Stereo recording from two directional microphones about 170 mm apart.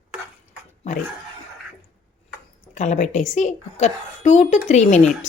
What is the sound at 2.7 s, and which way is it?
A woman's voice, 45° left (ahead or behind).